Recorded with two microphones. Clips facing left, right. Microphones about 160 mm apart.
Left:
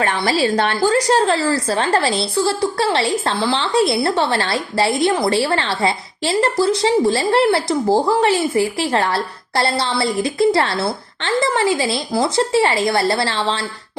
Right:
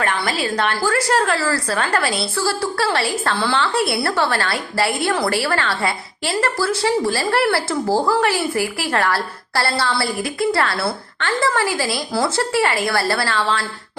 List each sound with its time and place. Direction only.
0.0 s a woman's voice: 30° left (ahead or behind)